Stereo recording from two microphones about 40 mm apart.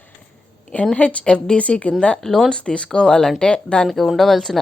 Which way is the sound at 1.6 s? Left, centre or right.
Left.